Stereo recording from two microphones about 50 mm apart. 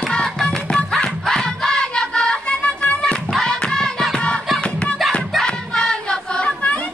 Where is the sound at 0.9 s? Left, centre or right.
Centre; by 3.2 s left.